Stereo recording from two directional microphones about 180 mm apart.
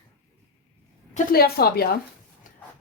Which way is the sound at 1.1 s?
55° left (ahead or behind).